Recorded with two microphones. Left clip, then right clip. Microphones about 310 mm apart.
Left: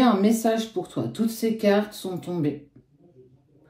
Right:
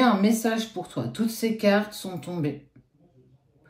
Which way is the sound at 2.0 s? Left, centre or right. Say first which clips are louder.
Left 4 dB; right.